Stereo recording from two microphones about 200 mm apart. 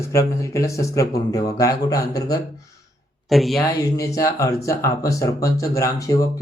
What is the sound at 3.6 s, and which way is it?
Speech, 15° left (ahead or behind).